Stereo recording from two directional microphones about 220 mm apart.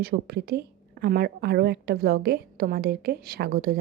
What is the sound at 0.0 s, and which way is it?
A woman's voice, 45° right (ahead or behind).